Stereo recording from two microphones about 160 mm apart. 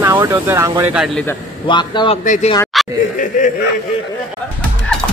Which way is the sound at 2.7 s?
Centre (ahead or behind).